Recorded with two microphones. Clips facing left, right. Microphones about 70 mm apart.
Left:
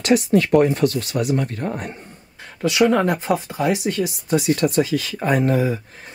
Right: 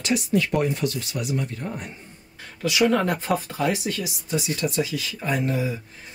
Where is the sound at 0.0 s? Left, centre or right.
Left.